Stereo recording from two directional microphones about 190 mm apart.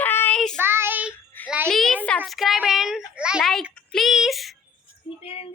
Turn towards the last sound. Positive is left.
turn(degrees=30)  # may be behind; listen again after turning